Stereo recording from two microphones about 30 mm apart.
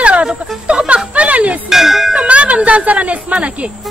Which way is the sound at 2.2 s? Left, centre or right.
Right.